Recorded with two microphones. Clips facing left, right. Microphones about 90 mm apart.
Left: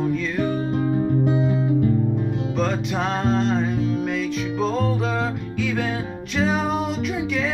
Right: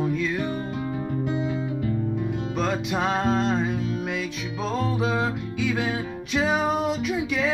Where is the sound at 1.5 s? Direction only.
35° left (ahead or behind).